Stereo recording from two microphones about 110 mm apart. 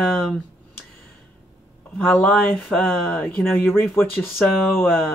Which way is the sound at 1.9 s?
15° left (ahead or behind).